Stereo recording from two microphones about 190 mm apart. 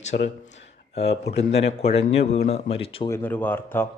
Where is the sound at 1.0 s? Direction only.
60° left (ahead or behind).